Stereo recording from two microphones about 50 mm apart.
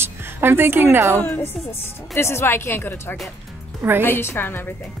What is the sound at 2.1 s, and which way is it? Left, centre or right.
A woman's voice, left.